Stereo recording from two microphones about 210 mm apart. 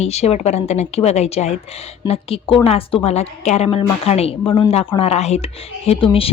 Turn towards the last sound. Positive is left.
turn(degrees=25)  # may be behind; listen again after turning